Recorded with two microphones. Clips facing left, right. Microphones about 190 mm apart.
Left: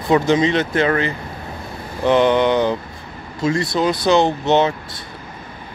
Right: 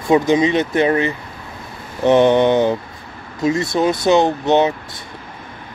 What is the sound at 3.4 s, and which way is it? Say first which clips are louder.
Speech: right 2 dB; 20° right (ahead or behind).